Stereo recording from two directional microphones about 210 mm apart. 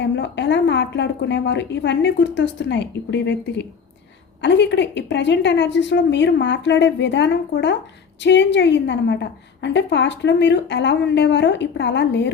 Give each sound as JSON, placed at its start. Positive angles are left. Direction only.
{"t": 0.0, "sound": "a woman's voice", "side_deg": 55}